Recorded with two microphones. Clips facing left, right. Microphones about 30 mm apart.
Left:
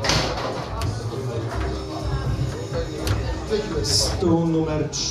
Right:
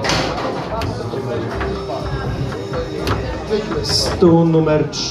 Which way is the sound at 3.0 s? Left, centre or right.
Right.